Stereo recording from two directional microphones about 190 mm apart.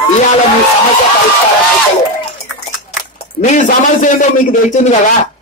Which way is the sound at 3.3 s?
40° left (ahead or behind).